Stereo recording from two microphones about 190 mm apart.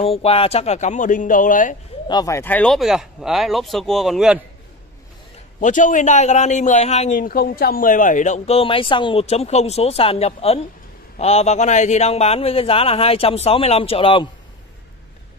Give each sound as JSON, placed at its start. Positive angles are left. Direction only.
{"t": 0.0, "sound": "a man's voice", "side_deg": 30}
{"t": 2.0, "sound": "speech", "side_deg": 20}
{"t": 5.6, "sound": "a man's voice", "side_deg": 45}